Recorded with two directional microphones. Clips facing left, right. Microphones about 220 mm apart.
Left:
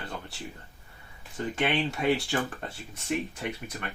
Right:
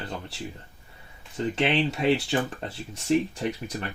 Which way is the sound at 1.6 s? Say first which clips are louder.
Right 3 dB; 25° right (ahead or behind).